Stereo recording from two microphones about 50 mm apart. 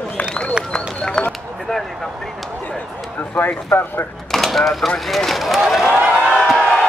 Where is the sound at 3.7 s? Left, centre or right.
Left.